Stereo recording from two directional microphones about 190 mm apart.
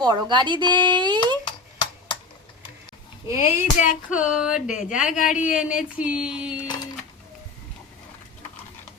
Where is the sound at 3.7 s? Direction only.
45° left (ahead or behind).